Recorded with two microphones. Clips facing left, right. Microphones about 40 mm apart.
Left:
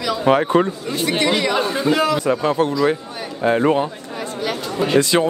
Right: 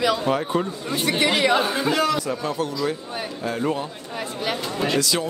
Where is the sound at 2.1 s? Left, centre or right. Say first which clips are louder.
Left 7 dB; left.